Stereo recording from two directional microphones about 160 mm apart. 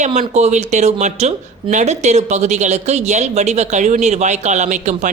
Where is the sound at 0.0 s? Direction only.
45° right (ahead or behind).